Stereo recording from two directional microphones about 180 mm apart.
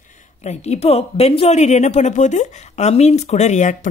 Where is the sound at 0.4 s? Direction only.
35° left (ahead or behind).